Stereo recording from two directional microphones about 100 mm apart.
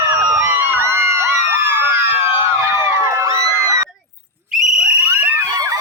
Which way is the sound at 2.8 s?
25° right (ahead or behind).